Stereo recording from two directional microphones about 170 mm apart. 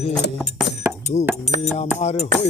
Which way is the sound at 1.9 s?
40° left (ahead or behind).